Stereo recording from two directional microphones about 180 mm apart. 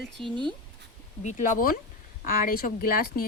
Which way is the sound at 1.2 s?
45° left (ahead or behind).